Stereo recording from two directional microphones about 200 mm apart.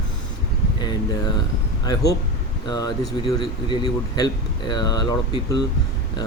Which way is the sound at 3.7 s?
20° left (ahead or behind).